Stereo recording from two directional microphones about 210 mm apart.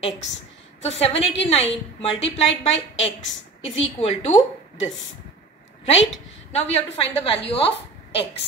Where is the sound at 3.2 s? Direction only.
65° left (ahead or behind).